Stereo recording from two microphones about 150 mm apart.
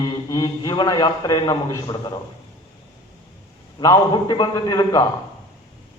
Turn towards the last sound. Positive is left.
turn(degrees=25)  # may be behind; listen again after turning